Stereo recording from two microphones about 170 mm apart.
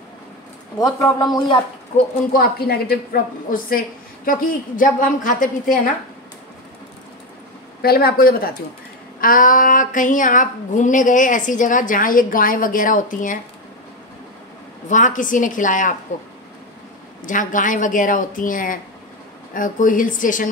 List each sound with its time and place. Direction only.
0.7 s speech: 20° left (ahead or behind)
2.3 s a woman's voice: 65° left (ahead or behind)
7.8 s a woman's voice: 65° left (ahead or behind)
14.9 s a woman's voice: 50° left (ahead or behind)
17.2 s a woman's voice: 50° left (ahead or behind)